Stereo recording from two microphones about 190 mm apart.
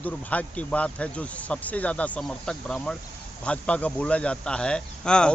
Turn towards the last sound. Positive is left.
turn(degrees=5)  # may be behind; listen again after turning